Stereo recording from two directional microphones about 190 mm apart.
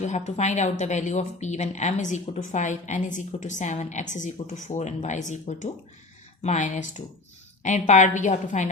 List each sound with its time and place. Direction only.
0.0 s speech: 35° left (ahead or behind)